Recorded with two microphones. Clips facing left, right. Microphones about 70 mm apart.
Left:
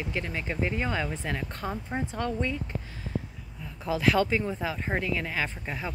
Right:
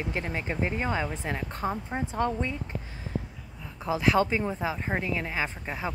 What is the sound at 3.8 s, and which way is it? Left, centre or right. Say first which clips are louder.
Speech: even; centre.